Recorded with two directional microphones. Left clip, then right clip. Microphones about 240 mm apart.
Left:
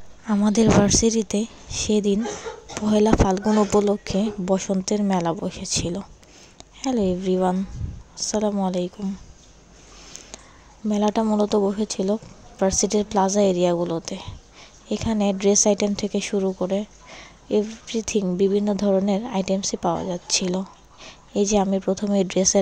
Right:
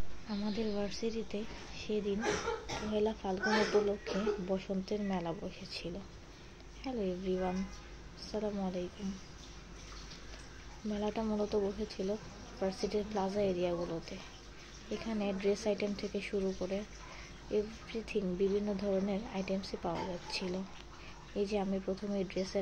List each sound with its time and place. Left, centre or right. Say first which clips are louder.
0.3 s a woman's voice: left 19 dB; left
10.9 s a woman's voice: left 15 dB; left